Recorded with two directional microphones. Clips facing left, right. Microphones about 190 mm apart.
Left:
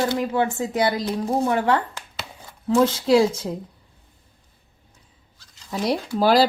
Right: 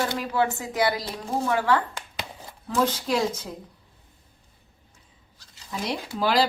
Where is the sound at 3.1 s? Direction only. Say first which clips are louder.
Left 12 dB; 30° left (ahead or behind).